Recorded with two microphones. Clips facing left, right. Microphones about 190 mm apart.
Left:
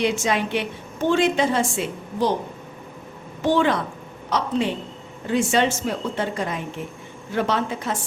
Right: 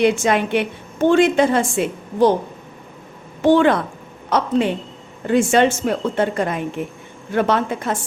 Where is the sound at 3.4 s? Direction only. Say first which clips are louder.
Right 6 dB; 55° right (ahead or behind).